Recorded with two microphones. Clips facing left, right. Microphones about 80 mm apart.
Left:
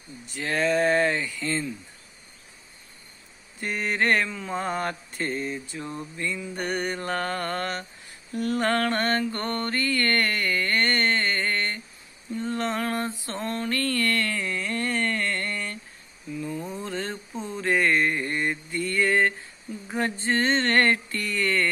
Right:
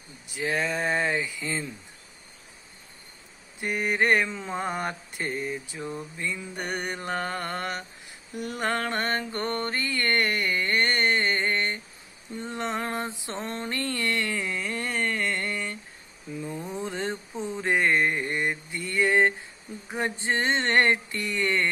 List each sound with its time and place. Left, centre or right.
0.3 s mantra: centre
3.6 s mantra: centre
16.3 s a sound: right
19.9 s mantra: centre